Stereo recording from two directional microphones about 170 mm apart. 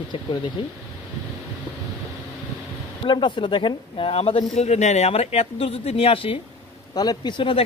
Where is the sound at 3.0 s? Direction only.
30° left (ahead or behind).